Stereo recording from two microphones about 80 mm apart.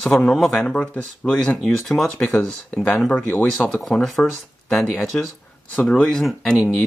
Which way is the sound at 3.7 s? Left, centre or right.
Centre.